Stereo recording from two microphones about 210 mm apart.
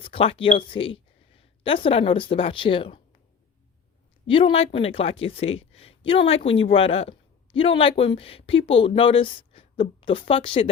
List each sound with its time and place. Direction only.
0.0 s speech: 25° left (ahead or behind)
4.3 s speech: 25° left (ahead or behind)